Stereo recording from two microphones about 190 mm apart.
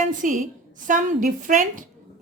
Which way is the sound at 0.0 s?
45° right (ahead or behind).